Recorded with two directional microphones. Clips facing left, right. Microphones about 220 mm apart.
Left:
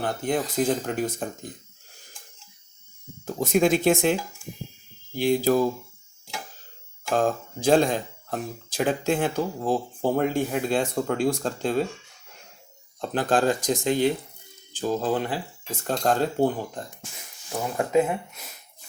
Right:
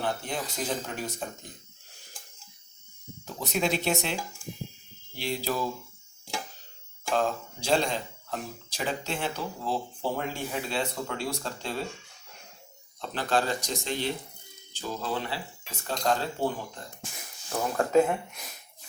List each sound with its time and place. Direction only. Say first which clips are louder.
0.0 s speech: left 6 dB; 50° left (ahead or behind)
3.2 s speech: left 8 dB; 50° left (ahead or behind)
7.1 s speech: left 4 dB; 50° left (ahead or behind)
13.0 s speech: left 5 dB; 50° left (ahead or behind)
17.5 s speech: left 1 dB; 10° left (ahead or behind)